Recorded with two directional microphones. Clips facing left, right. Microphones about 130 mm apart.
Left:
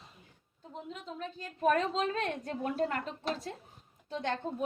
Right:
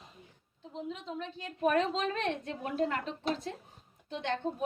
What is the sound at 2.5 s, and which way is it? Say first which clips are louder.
A woman's voice: even; 40° left (ahead or behind).